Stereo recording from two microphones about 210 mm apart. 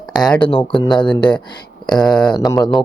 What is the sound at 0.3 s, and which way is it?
Speech, 25° left (ahead or behind).